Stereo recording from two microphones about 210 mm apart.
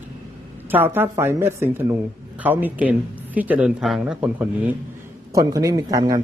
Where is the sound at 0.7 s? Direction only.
10° right (ahead or behind).